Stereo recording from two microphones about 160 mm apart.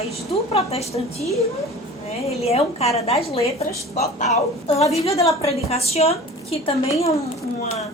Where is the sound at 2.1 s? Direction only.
40° left (ahead or behind).